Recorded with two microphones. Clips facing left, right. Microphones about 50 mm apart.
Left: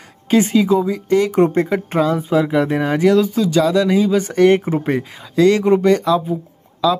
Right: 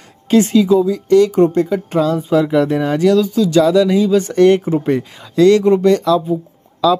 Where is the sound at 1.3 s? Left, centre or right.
Left.